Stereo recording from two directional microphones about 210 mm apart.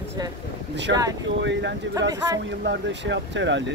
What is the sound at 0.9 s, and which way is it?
Speech, 55° right (ahead or behind).